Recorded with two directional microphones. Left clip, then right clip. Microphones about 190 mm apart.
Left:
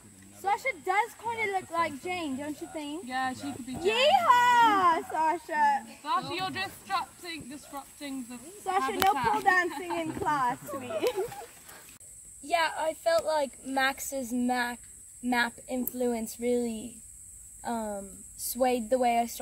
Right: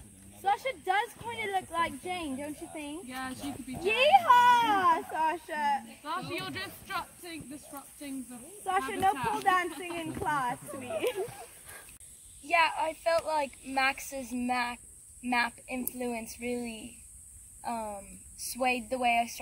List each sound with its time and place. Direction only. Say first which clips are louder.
0.4 s speech: left 1 dB; 20° left (ahead or behind)
3.1 s speech: left 10 dB; 35° left (ahead or behind)
3.9 s speech: right 1 dB; 20° left (ahead or behind)
6.0 s speech: left 5 dB; 40° left (ahead or behind)
8.6 s speech: left 2 dB; 30° left (ahead or behind)
12.4 s speech: right 1 dB; 60° left (ahead or behind)